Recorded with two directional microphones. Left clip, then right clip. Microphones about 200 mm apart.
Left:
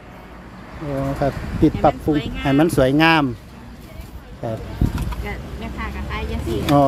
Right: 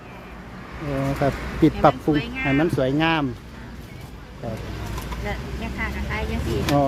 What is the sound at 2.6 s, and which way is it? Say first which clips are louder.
Speech: left 8 dB; 30° left (ahead or behind).